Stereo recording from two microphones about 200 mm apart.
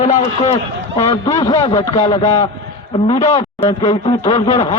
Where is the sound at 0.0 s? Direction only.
35° left (ahead or behind).